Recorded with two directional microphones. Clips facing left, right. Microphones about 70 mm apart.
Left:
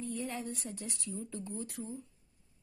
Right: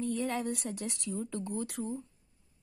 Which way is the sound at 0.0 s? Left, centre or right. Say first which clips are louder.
Right 6 dB; right.